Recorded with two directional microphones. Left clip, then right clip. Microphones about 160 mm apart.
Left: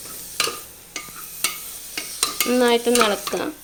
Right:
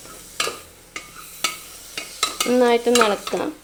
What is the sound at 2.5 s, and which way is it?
Stir, centre (ahead or behind).